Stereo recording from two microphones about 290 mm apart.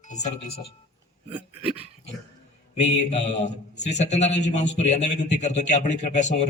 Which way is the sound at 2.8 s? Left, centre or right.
Left.